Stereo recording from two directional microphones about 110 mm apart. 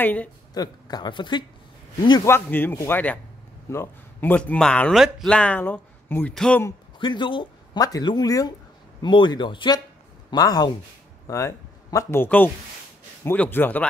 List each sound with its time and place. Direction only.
0.0 s speech: 15° left (ahead or behind)
0.6 s speech: 40° left (ahead or behind)
2.2 s speech: 20° left (ahead or behind); by 5.3 s centre (ahead or behind)
5.3 s speech: 10° left (ahead or behind)
6.3 s speech: 5° left (ahead or behind)
7.0 s a man's voice: 45° left (ahead or behind); by 13.8 s 15° left (ahead or behind)